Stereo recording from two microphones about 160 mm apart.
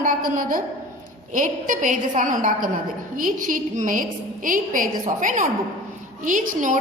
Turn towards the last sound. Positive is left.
turn(degrees=-55)  # may be behind; listen again after turning